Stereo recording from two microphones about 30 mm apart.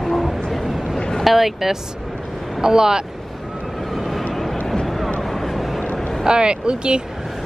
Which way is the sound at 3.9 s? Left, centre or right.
Centre.